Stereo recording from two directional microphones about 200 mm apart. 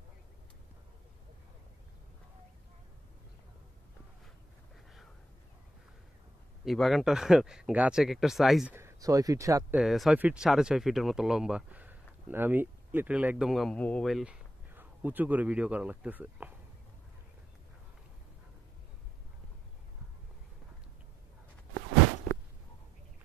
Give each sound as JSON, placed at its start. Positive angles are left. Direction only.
{"t": 6.6, "sound": "speech", "side_deg": 0}
{"t": 8.7, "sound": "speech", "side_deg": -15}
{"t": 9.8, "sound": "speech", "side_deg": 0}